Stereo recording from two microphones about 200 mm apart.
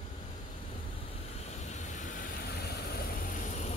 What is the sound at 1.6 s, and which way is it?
Vehicle, 35° left (ahead or behind).